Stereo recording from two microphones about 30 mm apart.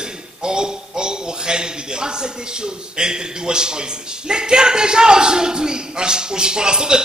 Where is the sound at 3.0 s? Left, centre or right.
Right.